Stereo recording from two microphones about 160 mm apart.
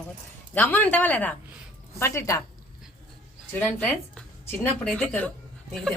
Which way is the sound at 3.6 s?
10° left (ahead or behind).